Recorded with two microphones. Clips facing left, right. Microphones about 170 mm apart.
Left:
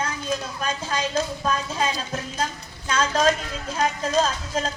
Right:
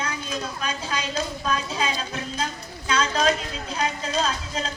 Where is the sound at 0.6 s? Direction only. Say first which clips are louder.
Left 2 dB; 45° left (ahead or behind).